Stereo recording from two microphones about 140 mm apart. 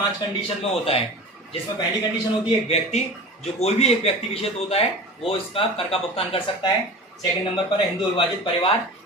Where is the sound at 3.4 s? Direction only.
50° left (ahead or behind).